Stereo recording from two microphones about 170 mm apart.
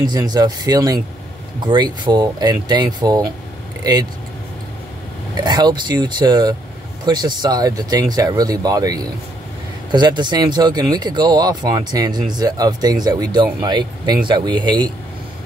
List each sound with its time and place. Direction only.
0.0 s speech: 25° right (ahead or behind)
5.4 s speech: 25° right (ahead or behind)